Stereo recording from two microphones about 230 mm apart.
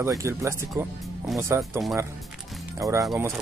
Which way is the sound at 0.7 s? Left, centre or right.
Centre.